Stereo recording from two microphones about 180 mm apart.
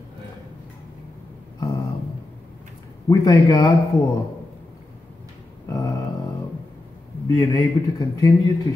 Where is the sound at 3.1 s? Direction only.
20° left (ahead or behind).